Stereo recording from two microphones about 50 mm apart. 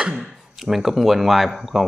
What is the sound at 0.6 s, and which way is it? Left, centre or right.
Speech, centre.